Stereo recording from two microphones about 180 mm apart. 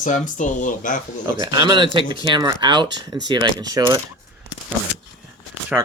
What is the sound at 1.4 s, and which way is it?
Speech, 25° right (ahead or behind).